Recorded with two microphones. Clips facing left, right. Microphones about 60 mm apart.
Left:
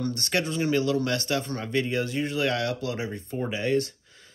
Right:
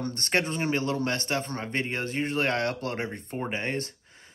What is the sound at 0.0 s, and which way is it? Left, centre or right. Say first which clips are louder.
Speech: even; right.